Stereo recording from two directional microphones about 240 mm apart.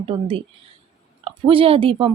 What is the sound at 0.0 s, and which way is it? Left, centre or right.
A woman's voice, right.